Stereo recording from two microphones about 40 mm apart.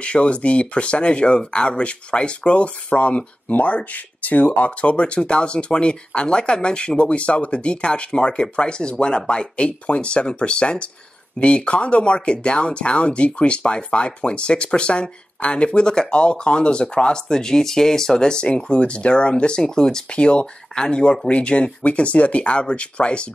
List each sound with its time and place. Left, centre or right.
0.0 s speech: left
20.1 s speech: left